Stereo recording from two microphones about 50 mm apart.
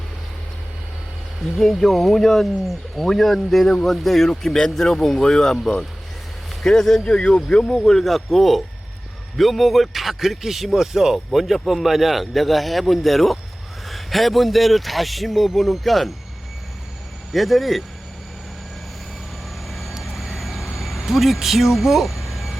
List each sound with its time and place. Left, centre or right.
1.4 s speech: centre
7.2 s speech: centre
7.7 s speech: centre
17.3 s speech: centre
19.6 s vehicle: centre